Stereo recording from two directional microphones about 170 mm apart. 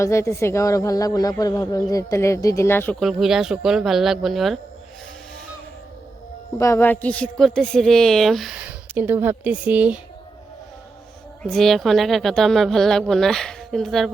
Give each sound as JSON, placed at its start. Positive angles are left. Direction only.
{"t": 0.0, "sound": "speech", "side_deg": 15}
{"t": 3.0, "sound": "a woman's voice", "side_deg": 0}
{"t": 6.6, "sound": "a woman's voice", "side_deg": 15}
{"t": 11.4, "sound": "a woman's voice", "side_deg": 0}